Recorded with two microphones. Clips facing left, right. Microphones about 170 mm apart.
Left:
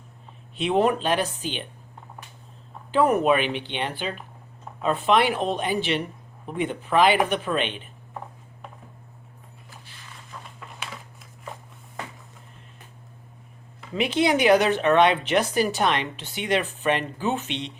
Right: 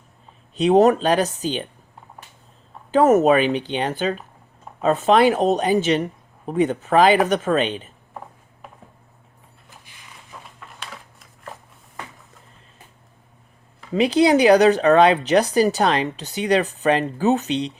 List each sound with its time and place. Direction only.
0.5 s speech: 40° right (ahead or behind)
2.9 s speech: 45° right (ahead or behind)
10.3 s a sound: 10° right (ahead or behind)
13.9 s speech: 35° right (ahead or behind)